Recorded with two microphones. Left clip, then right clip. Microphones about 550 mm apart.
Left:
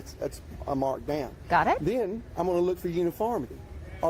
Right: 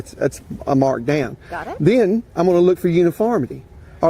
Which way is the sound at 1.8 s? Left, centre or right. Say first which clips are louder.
Right 13 dB; right.